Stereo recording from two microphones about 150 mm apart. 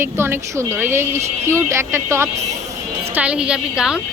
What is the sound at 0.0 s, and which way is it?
A woman's voice, 15° right (ahead or behind).